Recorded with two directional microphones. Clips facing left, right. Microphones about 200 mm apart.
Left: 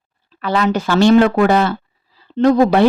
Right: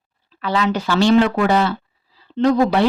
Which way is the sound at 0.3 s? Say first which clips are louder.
Left 3 dB; 50° left (ahead or behind).